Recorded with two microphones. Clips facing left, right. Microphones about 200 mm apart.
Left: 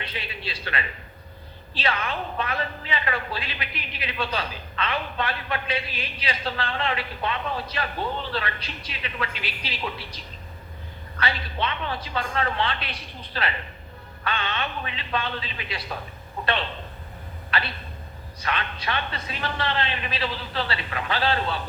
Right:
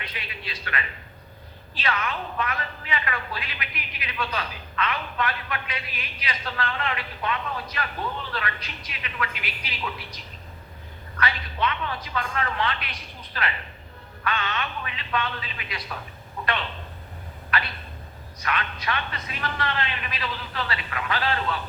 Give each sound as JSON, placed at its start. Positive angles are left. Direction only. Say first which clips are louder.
{"t": 0.0, "sound": "a woman's voice", "louder": "left 4 dB", "side_deg": 30}
{"t": 11.2, "sound": "a woman's voice", "louder": "right 1 dB", "side_deg": 30}
{"t": 17.5, "sound": "a woman's voice", "louder": "even", "side_deg": 30}